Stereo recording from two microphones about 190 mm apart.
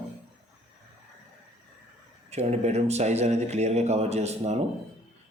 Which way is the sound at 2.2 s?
35° right (ahead or behind).